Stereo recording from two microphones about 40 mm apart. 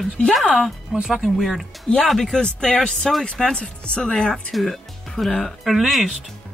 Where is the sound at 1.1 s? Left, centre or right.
Centre.